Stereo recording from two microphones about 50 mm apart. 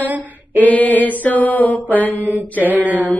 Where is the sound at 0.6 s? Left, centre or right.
Left.